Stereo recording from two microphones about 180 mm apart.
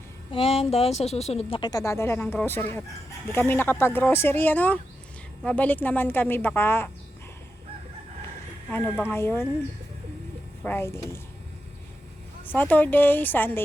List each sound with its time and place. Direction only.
0.3 s speech: 30° left (ahead or behind); by 6.9 s 10° left (ahead or behind)
8.7 s speech: 10° left (ahead or behind)
10.6 s speech: 10° left (ahead or behind)
12.5 s speech: 10° left (ahead or behind)